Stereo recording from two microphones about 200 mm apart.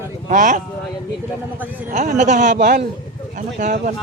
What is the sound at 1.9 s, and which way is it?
Speech, 40° right (ahead or behind).